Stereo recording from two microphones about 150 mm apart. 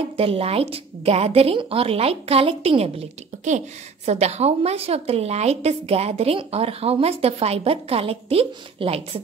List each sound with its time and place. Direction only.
0.2 s a woman's voice: 40° right (ahead or behind)